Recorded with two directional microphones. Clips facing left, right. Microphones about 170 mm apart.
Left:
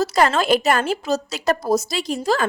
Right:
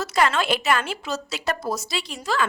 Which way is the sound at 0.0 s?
35° left (ahead or behind).